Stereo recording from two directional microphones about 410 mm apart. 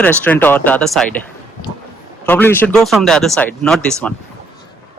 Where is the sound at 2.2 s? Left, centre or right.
Centre.